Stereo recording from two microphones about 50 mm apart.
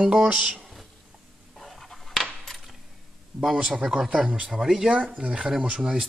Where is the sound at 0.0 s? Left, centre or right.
Centre.